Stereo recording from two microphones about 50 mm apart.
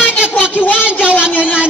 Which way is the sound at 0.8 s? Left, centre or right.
Right.